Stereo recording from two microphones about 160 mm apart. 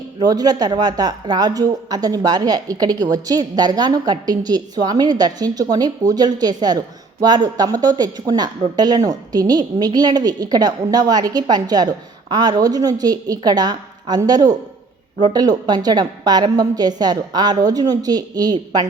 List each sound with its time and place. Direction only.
0.2 s a woman's voice: 25° right (ahead or behind)